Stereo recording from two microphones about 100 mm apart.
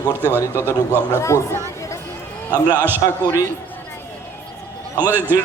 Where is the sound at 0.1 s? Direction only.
20° right (ahead or behind).